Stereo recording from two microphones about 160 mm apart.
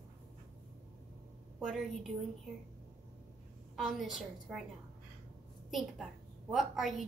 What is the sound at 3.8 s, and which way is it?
Speech, centre (ahead or behind).